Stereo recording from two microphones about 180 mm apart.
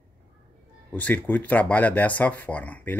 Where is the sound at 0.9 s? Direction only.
10° left (ahead or behind).